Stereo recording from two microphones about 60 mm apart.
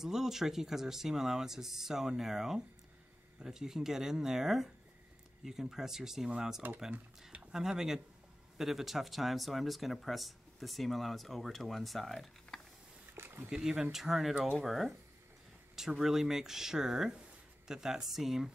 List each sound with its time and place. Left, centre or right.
0.0 s speech: centre
13.1 s a sound: right
13.5 s speech: centre